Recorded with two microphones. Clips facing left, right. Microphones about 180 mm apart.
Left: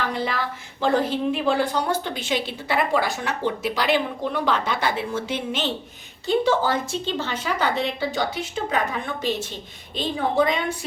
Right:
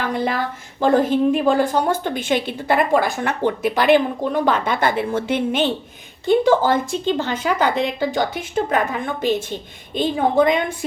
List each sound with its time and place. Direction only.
0.1 s a woman's voice: 50° right (ahead or behind)